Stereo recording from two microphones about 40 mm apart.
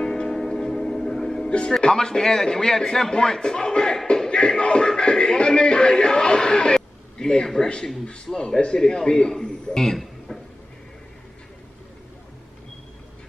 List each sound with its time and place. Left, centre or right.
0.0 s music: centre
1.7 s a man's voice: centre
4.1 s music: centre
8.3 s a man's voice: centre
9.8 s a sound: centre